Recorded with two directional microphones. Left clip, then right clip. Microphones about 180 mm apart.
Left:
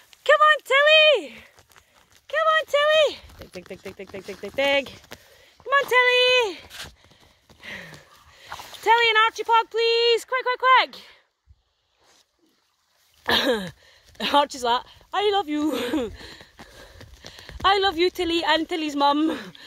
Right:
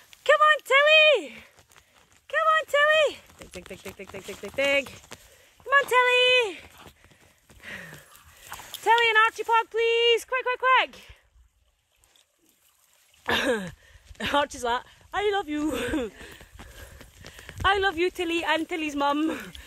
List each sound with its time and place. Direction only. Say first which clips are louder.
0.2 s a sound: left 3 dB; 10° left (ahead or behind)
3.5 s speech: left 3 dB; 15° left (ahead or behind)
7.6 s horse: left 2 dB; 25° left (ahead or behind)
8.5 s clip-clop: left 4 dB; 40° left (ahead or behind)
8.8 s speech: left 2 dB; 20° left (ahead or behind)
13.3 s a sound: left 4 dB; 25° left (ahead or behind)
14.1 s speech: left 5 dB; 25° left (ahead or behind)
17.0 s clip-clop: left 3 dB; 45° left (ahead or behind)
17.6 s speech: left 3 dB; 30° left (ahead or behind)